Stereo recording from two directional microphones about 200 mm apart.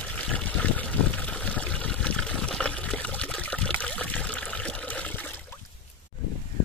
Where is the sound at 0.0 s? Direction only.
5° left (ahead or behind).